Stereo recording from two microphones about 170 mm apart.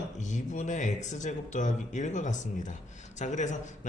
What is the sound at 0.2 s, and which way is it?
Speech, 45° left (ahead or behind).